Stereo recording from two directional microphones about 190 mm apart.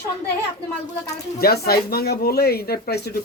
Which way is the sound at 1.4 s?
55° left (ahead or behind).